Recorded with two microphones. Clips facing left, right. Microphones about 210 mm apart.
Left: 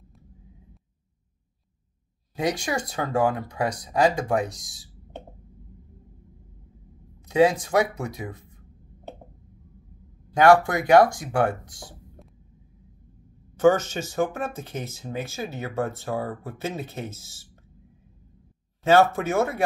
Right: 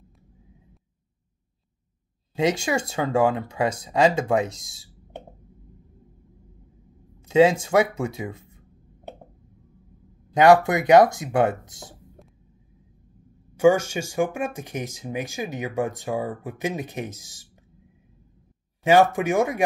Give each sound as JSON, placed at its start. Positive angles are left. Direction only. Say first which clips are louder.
{"t": 2.3, "sound": "speech", "louder": "right 3 dB", "side_deg": -25}
{"t": 7.2, "sound": "speech", "louder": "right 2 dB", "side_deg": -25}
{"t": 10.3, "sound": "speech", "louder": "right 1 dB", "side_deg": -20}
{"t": 13.6, "sound": "speech", "louder": "right 1 dB", "side_deg": -10}
{"t": 18.9, "sound": "speech", "louder": "right 1 dB", "side_deg": -15}